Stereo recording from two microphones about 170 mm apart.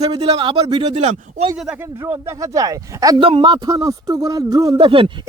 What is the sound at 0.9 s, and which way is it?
Speech, 40° right (ahead or behind).